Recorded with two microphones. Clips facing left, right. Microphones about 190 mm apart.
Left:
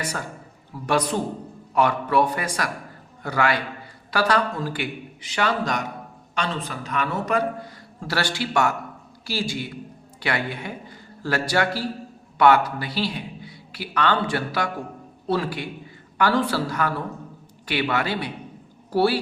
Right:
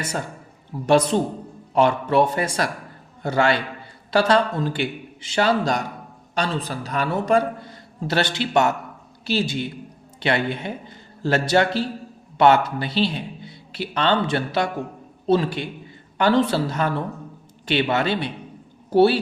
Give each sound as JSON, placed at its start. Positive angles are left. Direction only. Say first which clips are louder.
{"t": 0.0, "sound": "a man's voice", "louder": "right 2 dB", "side_deg": -25}